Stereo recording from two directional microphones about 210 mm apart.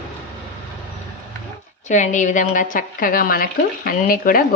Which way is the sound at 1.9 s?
35° left (ahead or behind).